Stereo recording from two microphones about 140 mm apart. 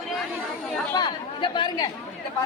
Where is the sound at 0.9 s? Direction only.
30° left (ahead or behind).